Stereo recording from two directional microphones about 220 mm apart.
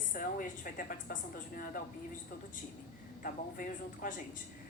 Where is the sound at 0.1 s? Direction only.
40° left (ahead or behind).